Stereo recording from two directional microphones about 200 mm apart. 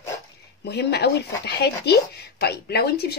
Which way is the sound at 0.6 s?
55° left (ahead or behind).